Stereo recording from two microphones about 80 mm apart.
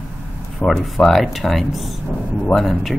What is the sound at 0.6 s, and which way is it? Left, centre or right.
Speech, centre.